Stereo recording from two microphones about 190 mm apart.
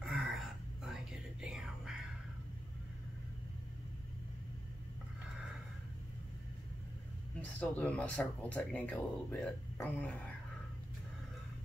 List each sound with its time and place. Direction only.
0.0 s whispering: centre (ahead or behind)
7.5 s speech: 5° left (ahead or behind)